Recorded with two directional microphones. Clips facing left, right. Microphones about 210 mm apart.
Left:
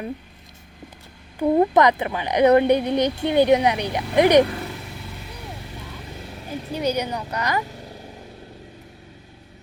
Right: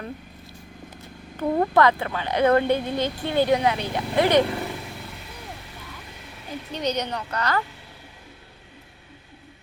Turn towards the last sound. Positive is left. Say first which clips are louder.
# left 9 dB
turn(degrees=40)  # may be behind; listen again after turning